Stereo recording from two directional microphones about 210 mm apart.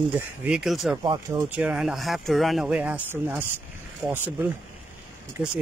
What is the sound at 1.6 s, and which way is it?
Speech, 5° right (ahead or behind).